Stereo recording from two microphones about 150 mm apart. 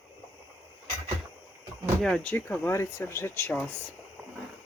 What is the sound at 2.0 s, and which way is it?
Speech, 5° left (ahead or behind).